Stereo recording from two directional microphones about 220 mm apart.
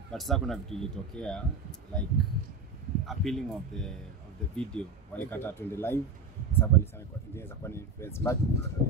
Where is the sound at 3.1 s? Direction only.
Centre (ahead or behind).